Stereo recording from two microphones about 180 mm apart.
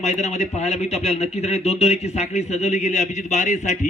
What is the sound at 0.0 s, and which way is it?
A man's voice, 40° left (ahead or behind).